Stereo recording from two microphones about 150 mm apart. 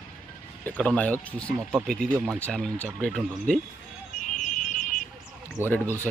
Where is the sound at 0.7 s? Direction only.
10° left (ahead or behind).